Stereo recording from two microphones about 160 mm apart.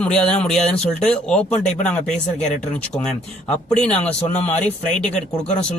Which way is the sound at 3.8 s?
10° left (ahead or behind).